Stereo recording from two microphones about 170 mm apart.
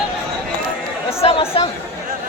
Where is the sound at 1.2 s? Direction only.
35° left (ahead or behind).